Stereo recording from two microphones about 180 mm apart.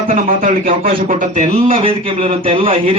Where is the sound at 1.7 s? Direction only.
30° right (ahead or behind).